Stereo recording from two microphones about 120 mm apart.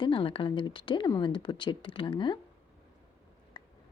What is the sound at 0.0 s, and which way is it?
Speech, 45° left (ahead or behind).